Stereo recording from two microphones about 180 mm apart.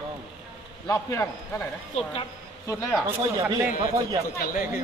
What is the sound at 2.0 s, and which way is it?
Speech, 35° left (ahead or behind).